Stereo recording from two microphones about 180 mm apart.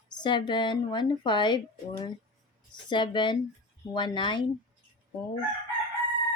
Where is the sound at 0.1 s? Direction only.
25° left (ahead or behind).